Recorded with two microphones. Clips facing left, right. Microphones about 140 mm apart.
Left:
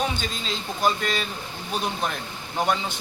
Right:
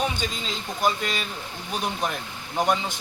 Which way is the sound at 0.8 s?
10° right (ahead or behind).